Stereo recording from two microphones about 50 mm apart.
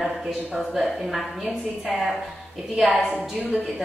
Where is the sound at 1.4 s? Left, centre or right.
Centre.